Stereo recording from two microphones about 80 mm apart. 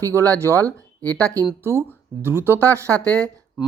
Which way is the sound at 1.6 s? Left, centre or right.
Right.